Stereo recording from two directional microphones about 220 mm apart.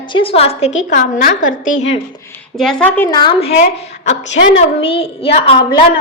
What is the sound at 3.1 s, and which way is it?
Speech, 20° left (ahead or behind).